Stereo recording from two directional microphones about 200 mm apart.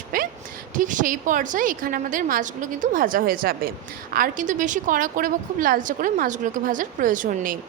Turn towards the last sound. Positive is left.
turn(degrees=-45)  # may be behind; listen again after turning